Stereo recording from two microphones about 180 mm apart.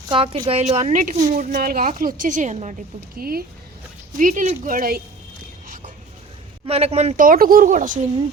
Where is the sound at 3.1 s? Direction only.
55° right (ahead or behind).